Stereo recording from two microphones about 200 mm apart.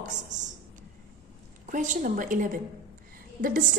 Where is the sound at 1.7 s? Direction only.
40° right (ahead or behind).